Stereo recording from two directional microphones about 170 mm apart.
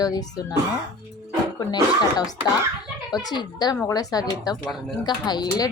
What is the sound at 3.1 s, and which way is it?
A woman's voice, 25° left (ahead or behind).